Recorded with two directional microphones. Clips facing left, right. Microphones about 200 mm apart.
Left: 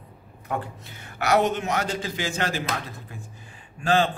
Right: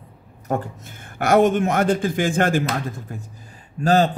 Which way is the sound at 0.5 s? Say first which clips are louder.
Right 5 dB; 45° right (ahead or behind).